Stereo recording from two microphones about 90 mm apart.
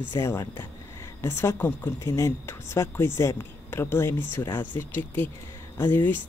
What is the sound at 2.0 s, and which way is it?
A woman's voice, 30° left (ahead or behind).